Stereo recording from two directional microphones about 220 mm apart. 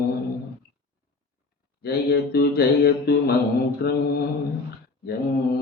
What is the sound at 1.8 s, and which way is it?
Mantra, 45° left (ahead or behind).